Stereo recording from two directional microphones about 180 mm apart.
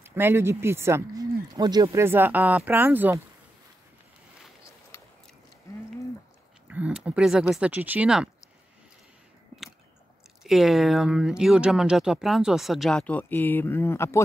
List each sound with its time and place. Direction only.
0.0 s speech: 10° right (ahead or behind)
6.7 s speech: 5° right (ahead or behind)
10.4 s speech: centre (ahead or behind)